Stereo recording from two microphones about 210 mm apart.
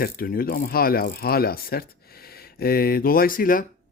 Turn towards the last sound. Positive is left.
turn(degrees=40)  # may be behind; listen again after turning